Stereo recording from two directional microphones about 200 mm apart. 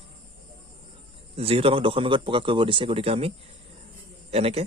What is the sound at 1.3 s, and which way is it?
A man's voice, 30° right (ahead or behind).